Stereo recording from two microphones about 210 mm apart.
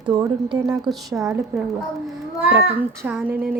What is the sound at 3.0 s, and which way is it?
Speech, 5° right (ahead or behind).